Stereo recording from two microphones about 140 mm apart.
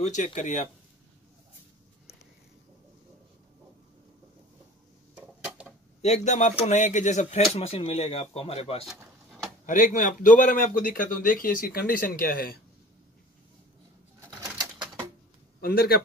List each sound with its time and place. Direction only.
0.0 s speech: 60° left (ahead or behind)
5.1 s a sound: 10° right (ahead or behind)
6.0 s speech: 55° left (ahead or behind)
9.7 s speech: 65° left (ahead or behind); by 12.5 s 90° left
15.6 s a man's voice: 90° left